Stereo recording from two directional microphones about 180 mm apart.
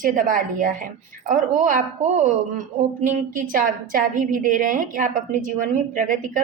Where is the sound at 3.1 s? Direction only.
50° right (ahead or behind).